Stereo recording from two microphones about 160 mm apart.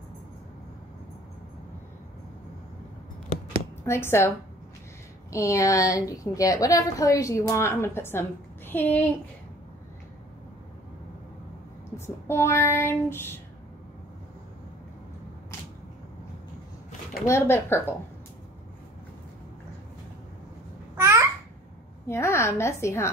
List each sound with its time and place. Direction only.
3.8 s a woman's voice: 15° left (ahead or behind)
5.3 s a woman's voice: 20° left (ahead or behind)
12.3 s a woman's voice: 15° left (ahead or behind)
17.3 s a woman's voice: 15° left (ahead or behind)
20.9 s babbling: 15° right (ahead or behind)
22.0 s a woman's voice: 15° left (ahead or behind)